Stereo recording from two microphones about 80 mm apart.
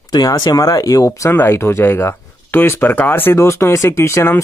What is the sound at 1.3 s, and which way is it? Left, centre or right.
A man's voice, left.